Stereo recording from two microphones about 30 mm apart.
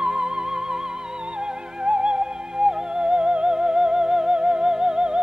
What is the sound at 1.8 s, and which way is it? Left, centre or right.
Music, right.